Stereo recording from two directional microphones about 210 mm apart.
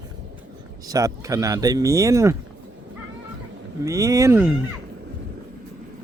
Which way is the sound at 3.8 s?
15° right (ahead or behind).